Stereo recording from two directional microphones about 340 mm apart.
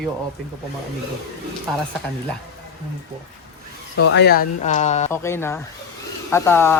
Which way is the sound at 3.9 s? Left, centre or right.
Left.